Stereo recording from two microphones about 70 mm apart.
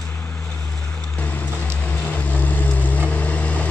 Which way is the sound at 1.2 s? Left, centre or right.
Left.